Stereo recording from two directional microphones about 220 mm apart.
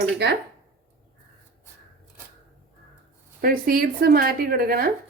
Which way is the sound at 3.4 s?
40° right (ahead or behind).